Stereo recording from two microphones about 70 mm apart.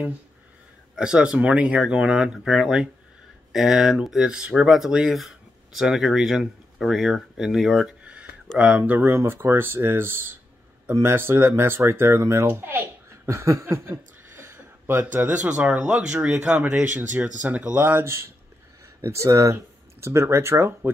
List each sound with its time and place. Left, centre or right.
0.9 s speech: centre
8.0 s a sound: centre
8.5 s speech: right
9.0 s speech: right
13.3 s chuckle: right
15.0 s speech: right